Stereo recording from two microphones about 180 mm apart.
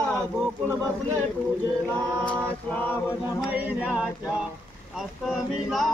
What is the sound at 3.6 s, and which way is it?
Music, 5° right (ahead or behind).